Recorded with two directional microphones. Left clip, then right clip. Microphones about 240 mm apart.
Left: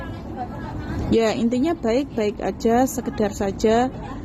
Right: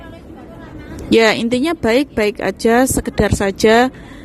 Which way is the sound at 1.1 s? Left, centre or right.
Right.